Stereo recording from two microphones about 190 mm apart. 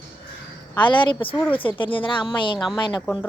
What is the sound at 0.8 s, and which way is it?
A woman's voice, 25° left (ahead or behind).